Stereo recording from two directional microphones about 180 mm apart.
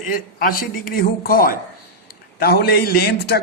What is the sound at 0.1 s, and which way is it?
A man's voice, 55° left (ahead or behind).